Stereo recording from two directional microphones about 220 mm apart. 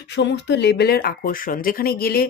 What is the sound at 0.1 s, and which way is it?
Speech, 50° left (ahead or behind).